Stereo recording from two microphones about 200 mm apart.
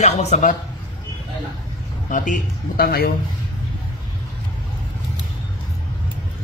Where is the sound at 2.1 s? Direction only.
40° left (ahead or behind).